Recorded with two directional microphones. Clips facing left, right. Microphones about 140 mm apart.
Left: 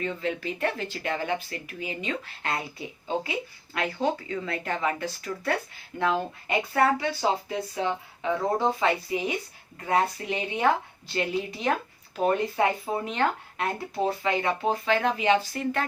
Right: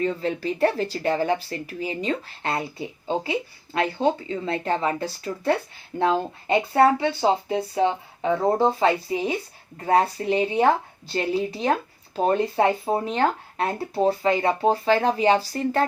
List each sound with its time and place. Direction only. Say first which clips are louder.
0.0 s speech: right 5 dB; 35° right (ahead or behind)